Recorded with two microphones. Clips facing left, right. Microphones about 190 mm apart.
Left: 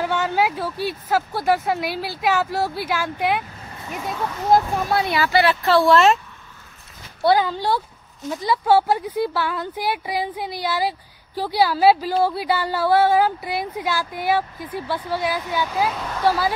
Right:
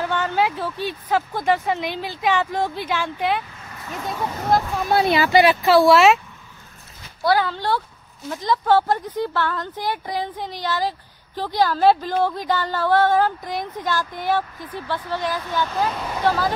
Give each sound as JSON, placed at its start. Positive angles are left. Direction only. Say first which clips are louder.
{"t": 0.0, "sound": "speech", "louder": "left 1 dB", "side_deg": 10}
{"t": 4.9, "sound": "speech", "louder": "right 5 dB", "side_deg": -30}
{"t": 5.2, "sound": "speech", "louder": "right 3 dB", "side_deg": -15}
{"t": 7.2, "sound": "speech", "louder": "left 2 dB", "side_deg": 15}